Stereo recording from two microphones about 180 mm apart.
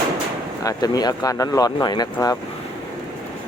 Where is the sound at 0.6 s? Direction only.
20° left (ahead or behind).